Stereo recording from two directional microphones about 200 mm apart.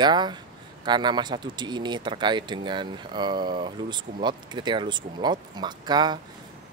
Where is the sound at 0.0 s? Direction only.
20° right (ahead or behind).